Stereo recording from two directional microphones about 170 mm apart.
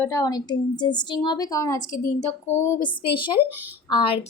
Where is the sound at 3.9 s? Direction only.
30° left (ahead or behind).